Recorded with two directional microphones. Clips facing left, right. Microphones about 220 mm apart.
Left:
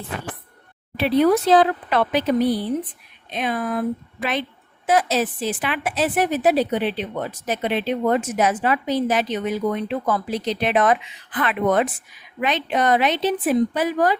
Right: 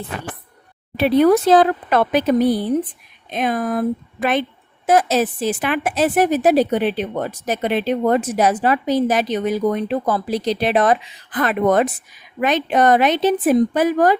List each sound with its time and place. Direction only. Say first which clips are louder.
0.9 s a woman's voice: right 3 dB; 50° right (ahead or behind)